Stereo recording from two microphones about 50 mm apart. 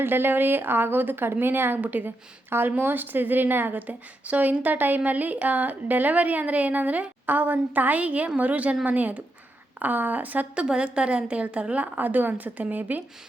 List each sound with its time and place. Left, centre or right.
0.0 s a woman's voice: right
10.5 s a woman's voice: centre